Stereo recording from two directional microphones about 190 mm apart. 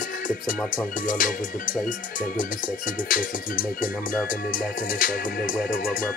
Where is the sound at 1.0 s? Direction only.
45° left (ahead or behind).